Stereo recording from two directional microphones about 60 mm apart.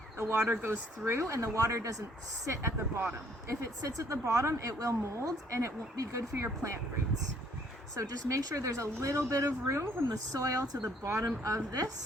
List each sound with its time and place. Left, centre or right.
0.4 s speech: right
1.0 s speech: right
7.9 s speech: right
10.1 s a woman's voice: right